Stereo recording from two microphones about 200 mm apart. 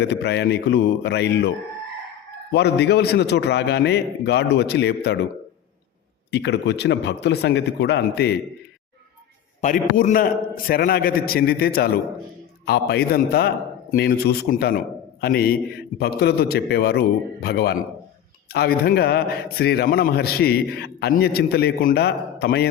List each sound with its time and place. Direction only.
0.0 s a man's voice: 55° left (ahead or behind)
6.3 s a man's voice: 60° left (ahead or behind)
9.6 s a man's voice: 40° left (ahead or behind)